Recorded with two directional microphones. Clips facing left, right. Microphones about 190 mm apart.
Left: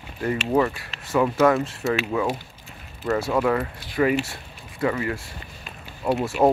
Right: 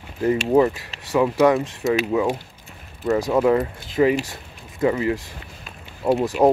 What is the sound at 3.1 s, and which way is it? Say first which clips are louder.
Speech: right 4 dB; 20° right (ahead or behind).